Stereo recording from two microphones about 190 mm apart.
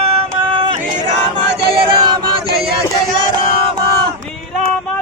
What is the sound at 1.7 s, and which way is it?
Chant, 25° right (ahead or behind).